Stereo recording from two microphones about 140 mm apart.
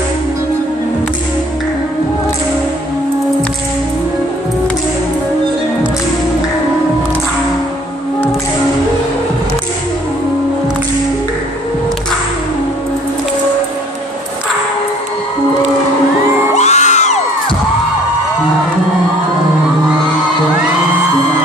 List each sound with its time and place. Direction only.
16.5 s music: 55° left (ahead or behind)